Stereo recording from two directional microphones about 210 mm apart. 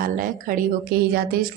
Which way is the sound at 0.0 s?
40° right (ahead or behind).